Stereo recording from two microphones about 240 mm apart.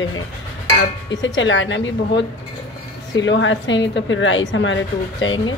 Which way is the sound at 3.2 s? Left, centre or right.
Left.